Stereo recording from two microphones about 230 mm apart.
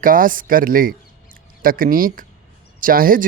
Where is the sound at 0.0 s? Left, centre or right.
Right.